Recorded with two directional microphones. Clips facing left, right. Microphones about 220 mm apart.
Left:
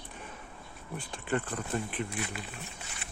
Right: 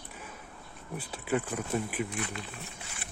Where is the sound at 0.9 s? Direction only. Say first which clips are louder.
Right 2 dB; 5° right (ahead or behind).